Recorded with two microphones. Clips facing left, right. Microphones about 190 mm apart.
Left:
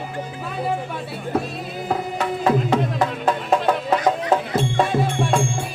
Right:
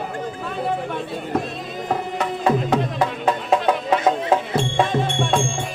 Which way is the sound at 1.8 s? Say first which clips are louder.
Even; centre (ahead or behind).